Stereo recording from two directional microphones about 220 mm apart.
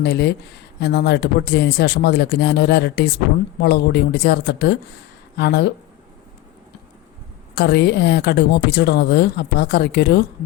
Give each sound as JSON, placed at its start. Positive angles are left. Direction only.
{"t": 0.0, "sound": "speech", "side_deg": 50}
{"t": 7.5, "sound": "speech", "side_deg": 50}